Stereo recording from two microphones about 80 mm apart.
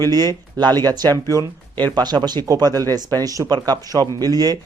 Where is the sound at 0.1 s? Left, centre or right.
Right.